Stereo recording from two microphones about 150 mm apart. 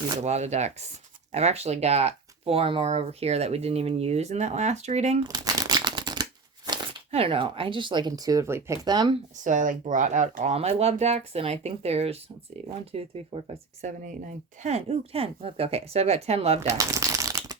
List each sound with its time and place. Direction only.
0.2 s speech: 45° right (ahead or behind)
5.2 s crumpling: 25° right (ahead or behind)
7.1 s speech: 40° right (ahead or behind)
9.4 s speech: 60° right (ahead or behind); by 13.9 s 40° right (ahead or behind)
14.0 s speech: 60° right (ahead or behind); by 16.6 s 45° right (ahead or behind)
16.6 s a sound: 20° right (ahead or behind)